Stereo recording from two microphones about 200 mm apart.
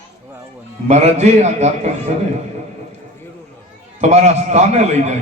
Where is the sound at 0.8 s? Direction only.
35° right (ahead or behind).